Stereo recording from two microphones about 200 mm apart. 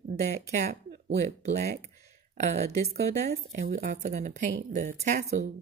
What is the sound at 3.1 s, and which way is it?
Speech, 15° left (ahead or behind).